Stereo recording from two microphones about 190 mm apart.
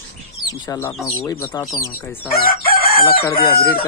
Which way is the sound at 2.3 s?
50° left (ahead or behind).